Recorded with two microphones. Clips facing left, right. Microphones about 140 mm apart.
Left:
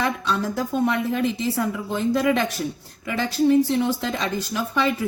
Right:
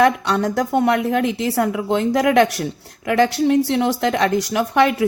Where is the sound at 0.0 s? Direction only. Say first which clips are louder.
Right 8 dB; 70° right (ahead or behind).